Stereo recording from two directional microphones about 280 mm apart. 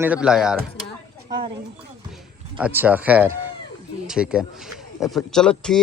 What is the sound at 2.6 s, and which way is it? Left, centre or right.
Speech, centre.